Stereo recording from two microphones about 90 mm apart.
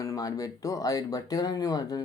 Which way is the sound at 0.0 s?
40° left (ahead or behind).